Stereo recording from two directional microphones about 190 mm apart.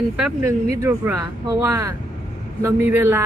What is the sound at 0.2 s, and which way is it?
Speech, 15° right (ahead or behind).